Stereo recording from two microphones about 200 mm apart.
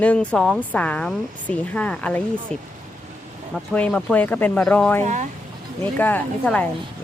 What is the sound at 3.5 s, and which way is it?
Speech, 5° left (ahead or behind).